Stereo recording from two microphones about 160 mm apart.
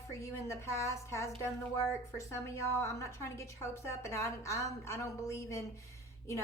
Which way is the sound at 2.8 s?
15° left (ahead or behind).